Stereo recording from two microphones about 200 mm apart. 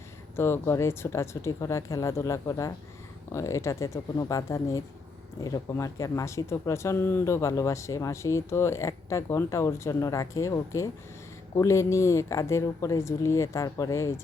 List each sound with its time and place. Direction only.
0.3 s speech: 10° left (ahead or behind)